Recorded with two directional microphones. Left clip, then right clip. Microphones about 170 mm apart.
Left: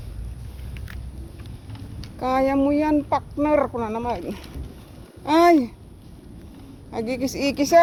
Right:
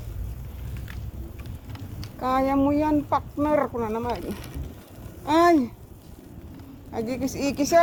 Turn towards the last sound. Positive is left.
turn(degrees=45)  # may be behind; listen again after turning